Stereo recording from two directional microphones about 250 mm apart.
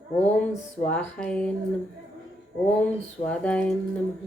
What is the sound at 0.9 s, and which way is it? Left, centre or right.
Music, centre.